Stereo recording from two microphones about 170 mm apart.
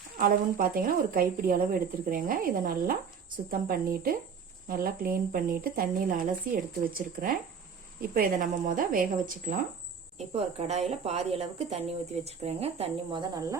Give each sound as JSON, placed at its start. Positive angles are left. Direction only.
{"t": 0.2, "sound": "speech", "side_deg": -55}
{"t": 10.2, "sound": "a woman's voice", "side_deg": -40}